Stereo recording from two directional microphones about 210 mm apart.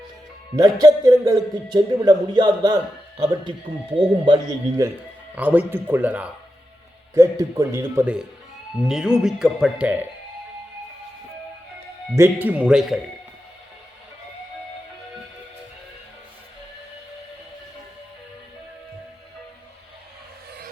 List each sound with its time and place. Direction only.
0.5 s a man's voice: 15° right (ahead or behind)
5.3 s a man's voice: 10° right (ahead or behind)
12.1 s a man's voice: 10° right (ahead or behind)